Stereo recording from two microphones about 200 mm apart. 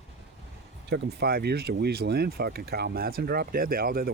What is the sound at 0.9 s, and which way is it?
Speech, 60° right (ahead or behind).